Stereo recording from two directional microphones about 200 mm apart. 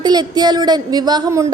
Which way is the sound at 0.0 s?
20° right (ahead or behind).